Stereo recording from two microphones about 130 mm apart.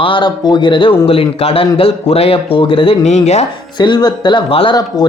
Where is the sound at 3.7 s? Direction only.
35° left (ahead or behind).